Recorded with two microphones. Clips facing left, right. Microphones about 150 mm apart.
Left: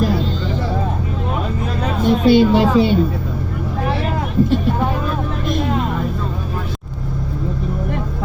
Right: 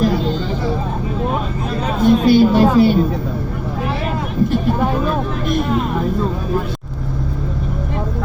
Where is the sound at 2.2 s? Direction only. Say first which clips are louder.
Left 2 dB; 20° left (ahead or behind).